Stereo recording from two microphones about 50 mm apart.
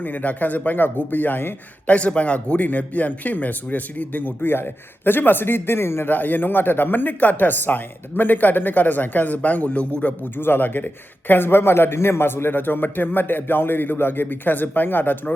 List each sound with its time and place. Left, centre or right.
0.0 s speech: left
1.9 s speech: left
6.1 s speech: left
10.3 s a man's voice: left